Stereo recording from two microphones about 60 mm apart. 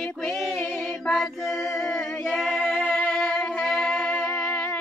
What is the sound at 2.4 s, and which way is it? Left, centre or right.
Female singing, centre.